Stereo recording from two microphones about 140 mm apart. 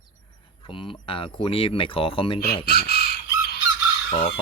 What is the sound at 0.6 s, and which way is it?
Speech, 40° left (ahead or behind).